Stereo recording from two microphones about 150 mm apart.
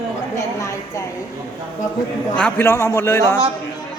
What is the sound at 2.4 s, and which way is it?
A man's voice, 15° left (ahead or behind).